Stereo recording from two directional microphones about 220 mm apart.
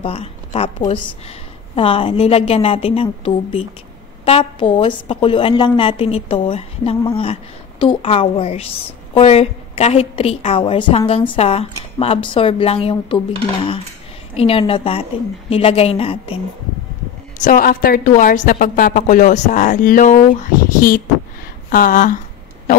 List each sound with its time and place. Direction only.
0.0 s a woman's voice: 25° left (ahead or behind)
14.3 s a woman's voice: 25° left (ahead or behind)
17.4 s a woman's voice: 40° left (ahead or behind)